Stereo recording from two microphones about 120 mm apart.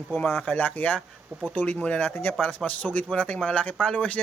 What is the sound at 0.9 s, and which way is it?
Speech, centre (ahead or behind).